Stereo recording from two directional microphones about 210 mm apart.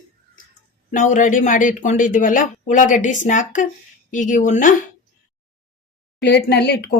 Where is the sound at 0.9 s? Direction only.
40° left (ahead or behind).